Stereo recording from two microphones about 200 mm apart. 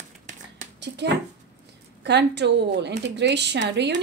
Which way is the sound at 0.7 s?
60° right (ahead or behind).